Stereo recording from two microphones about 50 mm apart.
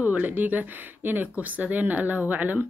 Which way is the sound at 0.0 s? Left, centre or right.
Right.